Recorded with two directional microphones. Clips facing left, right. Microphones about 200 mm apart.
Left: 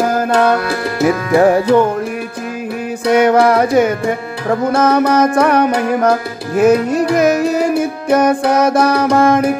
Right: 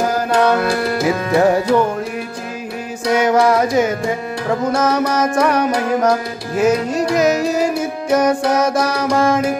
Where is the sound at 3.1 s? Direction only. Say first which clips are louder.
Left 3 dB; 60° left (ahead or behind).